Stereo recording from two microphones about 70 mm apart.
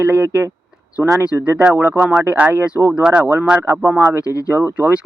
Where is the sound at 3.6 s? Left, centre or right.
Right.